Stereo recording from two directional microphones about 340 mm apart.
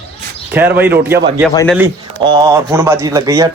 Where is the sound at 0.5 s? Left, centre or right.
Centre.